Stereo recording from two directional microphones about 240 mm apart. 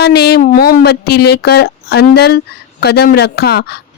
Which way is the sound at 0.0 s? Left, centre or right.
Left.